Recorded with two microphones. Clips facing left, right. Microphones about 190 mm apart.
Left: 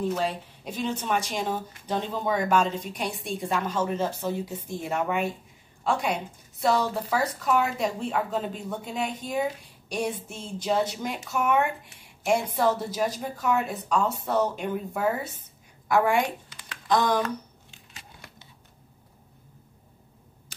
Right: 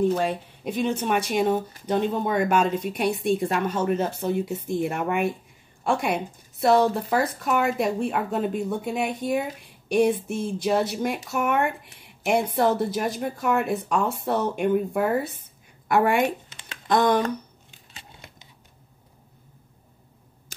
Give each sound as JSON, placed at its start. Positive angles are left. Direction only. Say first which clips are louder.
{"t": 0.2, "sound": "speech", "louder": "right 3 dB", "side_deg": -55}
{"t": 16.4, "sound": "a sound", "louder": "right 1 dB", "side_deg": -25}
{"t": 16.8, "sound": "speech", "louder": "right 3 dB", "side_deg": -55}
{"t": 17.9, "sound": "crumpling", "louder": "right 2 dB", "side_deg": -20}